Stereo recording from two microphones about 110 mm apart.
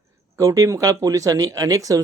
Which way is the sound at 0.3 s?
30° right (ahead or behind).